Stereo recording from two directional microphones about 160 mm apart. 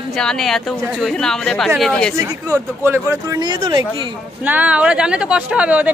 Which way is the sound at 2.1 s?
15° right (ahead or behind).